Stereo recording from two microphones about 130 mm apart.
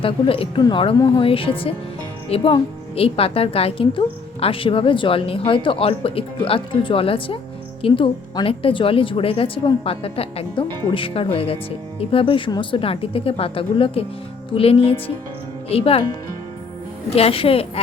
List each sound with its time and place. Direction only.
0.0 s a woman's voice: 45° left (ahead or behind)
17.1 s a woman's voice: 50° left (ahead or behind)